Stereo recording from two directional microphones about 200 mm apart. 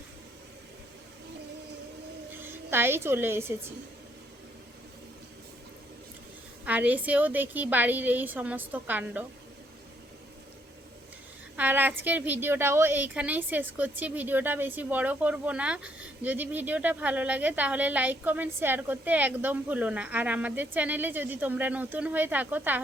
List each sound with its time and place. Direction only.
2.4 s a woman's voice: 10° right (ahead or behind)
6.7 s a woman's voice: 10° right (ahead or behind)
11.5 s a woman's voice: 10° right (ahead or behind)